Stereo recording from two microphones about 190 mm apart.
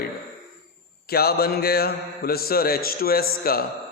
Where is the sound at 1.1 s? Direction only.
55° left (ahead or behind).